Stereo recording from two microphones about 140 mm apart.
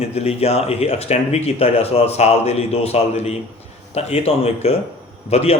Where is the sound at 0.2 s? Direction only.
45° left (ahead or behind).